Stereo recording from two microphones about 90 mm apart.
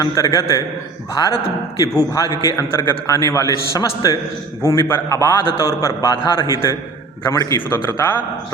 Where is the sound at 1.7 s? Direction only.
40° left (ahead or behind).